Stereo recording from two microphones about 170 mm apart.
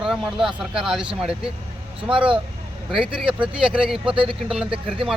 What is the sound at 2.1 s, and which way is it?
Speech, 30° right (ahead or behind).